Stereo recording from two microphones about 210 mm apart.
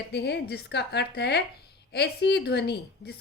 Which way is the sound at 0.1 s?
55° left (ahead or behind).